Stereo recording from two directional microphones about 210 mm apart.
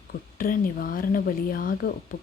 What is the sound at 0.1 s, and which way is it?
Speech, 40° left (ahead or behind).